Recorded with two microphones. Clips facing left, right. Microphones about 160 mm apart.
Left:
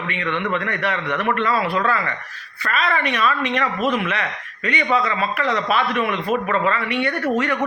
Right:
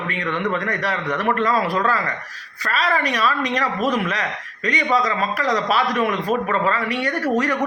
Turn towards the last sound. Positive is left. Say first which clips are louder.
# even
turn(degrees=-35)  # may be behind; listen again after turning